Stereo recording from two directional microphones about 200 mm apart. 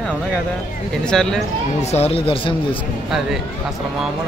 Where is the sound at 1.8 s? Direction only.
30° left (ahead or behind).